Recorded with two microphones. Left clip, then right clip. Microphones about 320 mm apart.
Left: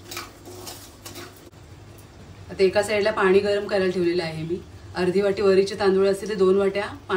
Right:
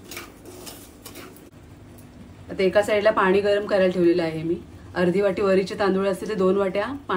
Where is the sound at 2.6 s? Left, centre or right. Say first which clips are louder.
Right 1 dB; right.